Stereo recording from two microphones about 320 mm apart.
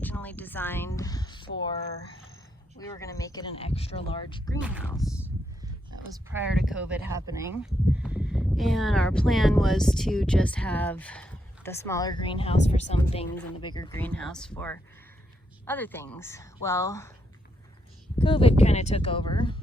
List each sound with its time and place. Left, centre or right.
0.0 s a sound: centre
2.7 s speech: centre
4.6 s speech: centre
18.2 s speech: centre